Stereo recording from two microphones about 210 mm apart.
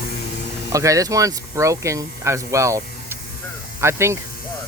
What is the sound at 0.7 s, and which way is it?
Speech, 15° right (ahead or behind).